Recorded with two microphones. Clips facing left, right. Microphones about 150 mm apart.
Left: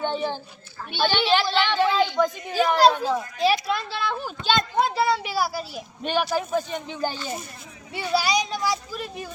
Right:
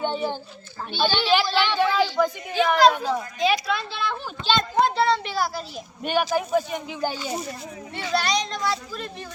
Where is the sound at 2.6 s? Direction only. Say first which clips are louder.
Even; 35° left (ahead or behind).